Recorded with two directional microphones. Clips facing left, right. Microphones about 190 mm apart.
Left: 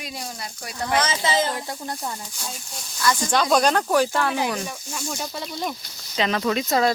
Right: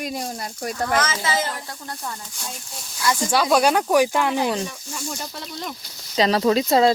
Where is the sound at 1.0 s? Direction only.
25° left (ahead or behind).